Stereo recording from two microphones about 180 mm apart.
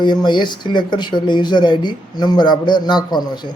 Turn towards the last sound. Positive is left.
turn(degrees=25)  # may be behind; listen again after turning